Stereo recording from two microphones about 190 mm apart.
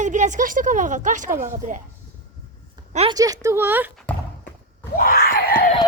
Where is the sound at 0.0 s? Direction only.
40° right (ahead or behind).